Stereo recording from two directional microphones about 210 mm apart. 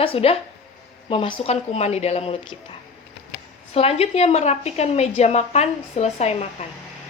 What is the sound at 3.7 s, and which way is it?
A woman's voice, 30° left (ahead or behind).